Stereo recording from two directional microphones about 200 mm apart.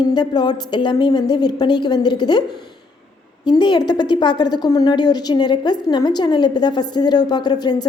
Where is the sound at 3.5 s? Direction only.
20° left (ahead or behind).